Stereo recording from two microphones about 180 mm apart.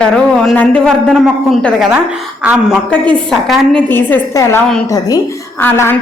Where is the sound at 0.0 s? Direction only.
5° left (ahead or behind).